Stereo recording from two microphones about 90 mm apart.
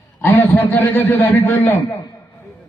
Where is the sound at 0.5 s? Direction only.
20° left (ahead or behind).